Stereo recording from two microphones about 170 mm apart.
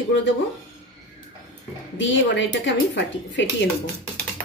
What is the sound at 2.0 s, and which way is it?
Speech, 90° left.